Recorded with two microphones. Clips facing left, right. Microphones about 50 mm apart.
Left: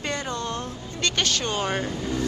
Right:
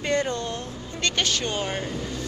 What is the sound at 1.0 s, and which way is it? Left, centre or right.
Speech, centre.